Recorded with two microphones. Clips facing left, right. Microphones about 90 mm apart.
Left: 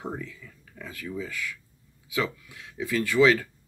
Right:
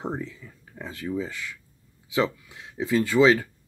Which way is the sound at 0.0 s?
30° right (ahead or behind).